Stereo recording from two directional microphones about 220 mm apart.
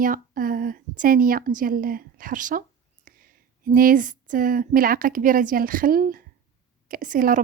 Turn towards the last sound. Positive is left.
turn(degrees=-35)  # may be behind; listen again after turning